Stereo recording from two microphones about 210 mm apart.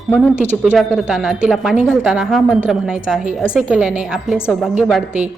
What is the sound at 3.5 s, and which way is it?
Speech, 5° right (ahead or behind).